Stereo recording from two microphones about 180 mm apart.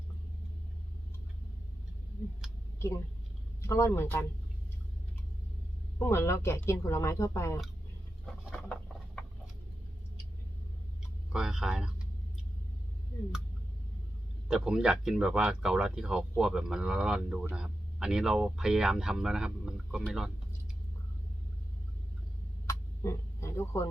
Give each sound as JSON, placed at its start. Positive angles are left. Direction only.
{"t": 2.4, "sound": "a sound", "side_deg": 0}
{"t": 3.6, "sound": "speech", "side_deg": 15}
{"t": 6.0, "sound": "speech", "side_deg": 15}
{"t": 8.5, "sound": "a sound", "side_deg": 5}
{"t": 11.3, "sound": "speech", "side_deg": -5}
{"t": 14.4, "sound": "speech", "side_deg": -5}
{"t": 22.6, "sound": "vehicle", "side_deg": 15}